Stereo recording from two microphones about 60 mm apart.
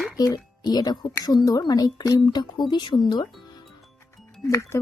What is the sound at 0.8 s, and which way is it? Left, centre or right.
A woman's voice, left.